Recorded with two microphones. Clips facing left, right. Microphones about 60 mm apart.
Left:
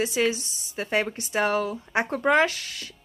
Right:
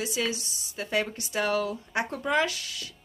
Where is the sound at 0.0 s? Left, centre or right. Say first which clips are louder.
Left 6 dB; left.